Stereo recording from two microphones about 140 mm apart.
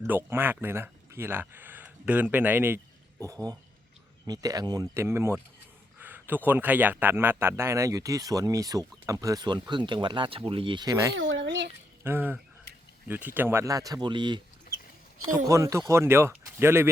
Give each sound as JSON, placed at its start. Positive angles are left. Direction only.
{"t": 0.0, "sound": "a man's voice", "side_deg": -15}
{"t": 12.0, "sound": "a man's voice", "side_deg": -15}
{"t": 15.4, "sound": "a man's voice", "side_deg": -20}